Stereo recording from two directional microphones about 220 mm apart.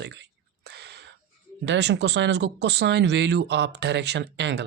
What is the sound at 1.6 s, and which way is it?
Speech, 50° right (ahead or behind).